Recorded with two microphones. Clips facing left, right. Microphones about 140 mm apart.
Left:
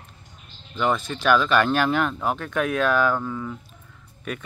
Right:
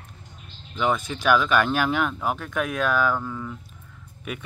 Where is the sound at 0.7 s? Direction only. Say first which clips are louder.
Left 1 dB; 10° right (ahead or behind).